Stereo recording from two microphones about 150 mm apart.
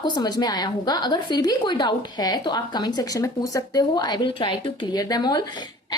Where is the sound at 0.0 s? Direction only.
30° left (ahead or behind).